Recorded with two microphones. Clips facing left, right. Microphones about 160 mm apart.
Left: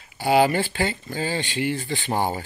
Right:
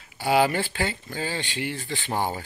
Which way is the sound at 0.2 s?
Centre (ahead or behind).